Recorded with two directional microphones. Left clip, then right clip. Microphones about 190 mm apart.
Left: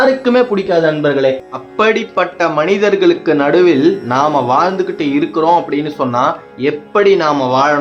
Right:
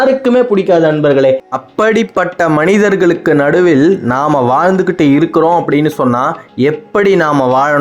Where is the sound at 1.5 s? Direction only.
50° right (ahead or behind).